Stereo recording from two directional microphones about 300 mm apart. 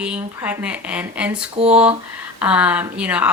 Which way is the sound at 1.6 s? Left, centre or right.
Centre.